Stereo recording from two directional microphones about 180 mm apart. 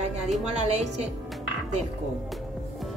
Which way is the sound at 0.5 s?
35° right (ahead or behind).